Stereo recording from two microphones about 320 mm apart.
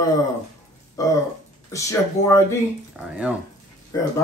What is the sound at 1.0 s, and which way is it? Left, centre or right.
Speech, centre.